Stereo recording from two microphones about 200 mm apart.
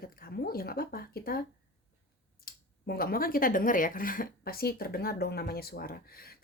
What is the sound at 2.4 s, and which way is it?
Speech, 50° left (ahead or behind).